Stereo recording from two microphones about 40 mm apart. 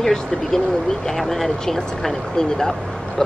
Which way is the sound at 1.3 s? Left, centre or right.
Centre.